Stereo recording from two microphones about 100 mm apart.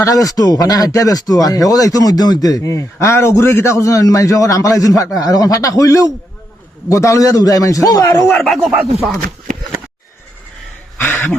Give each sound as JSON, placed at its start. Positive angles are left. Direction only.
{"t": 0.0, "sound": "speech", "side_deg": 35}
{"t": 8.2, "sound": "speech", "side_deg": 5}
{"t": 8.7, "sound": "speech", "side_deg": -10}
{"t": 11.0, "sound": "a sound", "side_deg": 20}